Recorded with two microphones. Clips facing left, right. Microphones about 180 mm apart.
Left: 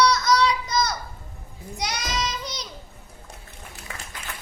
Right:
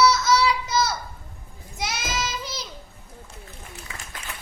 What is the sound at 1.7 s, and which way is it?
Child singing, 5° right (ahead or behind).